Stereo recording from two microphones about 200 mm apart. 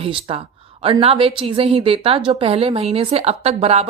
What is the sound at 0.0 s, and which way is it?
A woman's voice, 30° right (ahead or behind).